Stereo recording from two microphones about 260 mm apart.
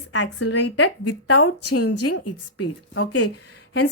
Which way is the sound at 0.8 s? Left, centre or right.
Left.